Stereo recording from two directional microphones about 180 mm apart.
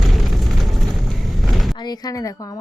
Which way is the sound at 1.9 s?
20° left (ahead or behind).